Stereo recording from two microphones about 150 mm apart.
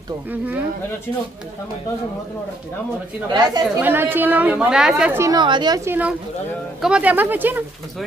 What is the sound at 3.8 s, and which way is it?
A woman's voice, 15° right (ahead or behind).